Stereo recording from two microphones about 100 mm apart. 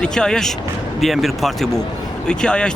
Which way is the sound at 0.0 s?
5° left (ahead or behind).